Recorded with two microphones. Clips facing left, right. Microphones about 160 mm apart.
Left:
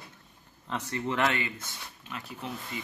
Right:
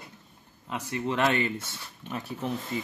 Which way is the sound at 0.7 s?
10° right (ahead or behind).